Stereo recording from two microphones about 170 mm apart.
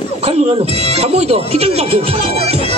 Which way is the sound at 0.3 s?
35° right (ahead or behind).